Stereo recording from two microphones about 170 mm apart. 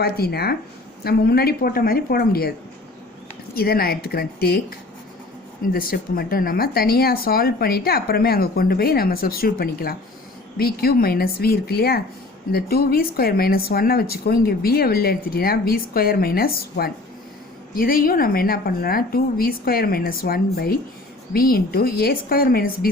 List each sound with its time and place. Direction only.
0.0 s speech: 65° left (ahead or behind)
3.5 s speech: 65° left (ahead or behind)
5.7 s speech: 60° left (ahead or behind)